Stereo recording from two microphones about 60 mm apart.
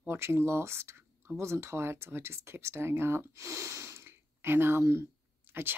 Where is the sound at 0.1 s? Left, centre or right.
Right.